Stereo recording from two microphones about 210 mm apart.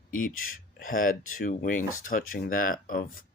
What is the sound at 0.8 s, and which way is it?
Speech, 40° left (ahead or behind).